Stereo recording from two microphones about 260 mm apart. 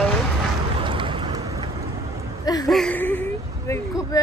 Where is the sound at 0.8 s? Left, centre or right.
Centre.